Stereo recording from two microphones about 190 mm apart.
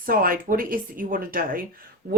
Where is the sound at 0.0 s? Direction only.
50° right (ahead or behind).